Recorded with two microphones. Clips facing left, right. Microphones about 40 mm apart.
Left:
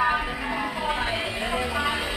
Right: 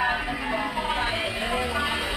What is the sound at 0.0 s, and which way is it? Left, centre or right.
Music, centre.